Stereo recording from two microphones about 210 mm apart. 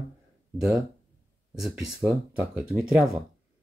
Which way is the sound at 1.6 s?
5° right (ahead or behind).